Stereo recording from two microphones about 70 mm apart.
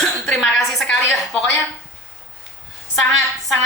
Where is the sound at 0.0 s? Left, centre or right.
Centre.